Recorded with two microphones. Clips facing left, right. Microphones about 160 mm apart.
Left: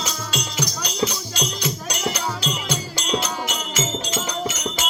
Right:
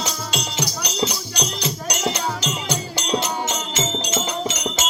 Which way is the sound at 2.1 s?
25° right (ahead or behind).